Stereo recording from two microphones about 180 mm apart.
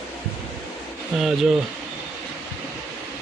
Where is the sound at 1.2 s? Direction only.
5° right (ahead or behind).